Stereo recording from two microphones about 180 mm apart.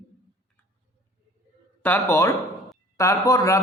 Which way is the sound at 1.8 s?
10° left (ahead or behind).